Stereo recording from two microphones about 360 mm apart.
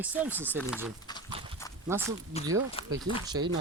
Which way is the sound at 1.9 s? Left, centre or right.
Centre.